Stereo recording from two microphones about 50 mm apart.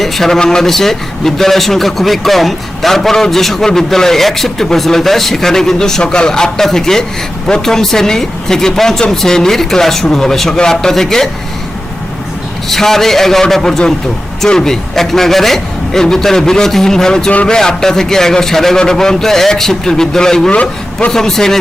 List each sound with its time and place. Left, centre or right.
0.0 s a man's voice: centre
12.6 s speech: centre
20.5 s a man's voice: left
21.1 s speech: centre